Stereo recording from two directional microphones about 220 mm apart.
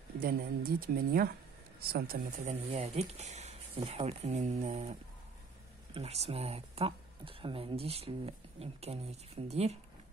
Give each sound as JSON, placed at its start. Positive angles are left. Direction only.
{"t": 0.2, "sound": "speech", "side_deg": -40}
{"t": 5.9, "sound": "speech", "side_deg": -30}